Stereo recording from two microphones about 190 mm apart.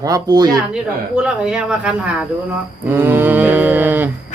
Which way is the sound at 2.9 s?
10° right (ahead or behind).